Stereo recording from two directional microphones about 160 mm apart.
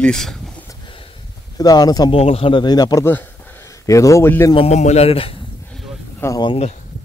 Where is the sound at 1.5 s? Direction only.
25° left (ahead or behind).